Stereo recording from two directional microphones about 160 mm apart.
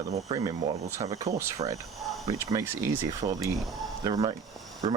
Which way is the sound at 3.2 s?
35° right (ahead or behind).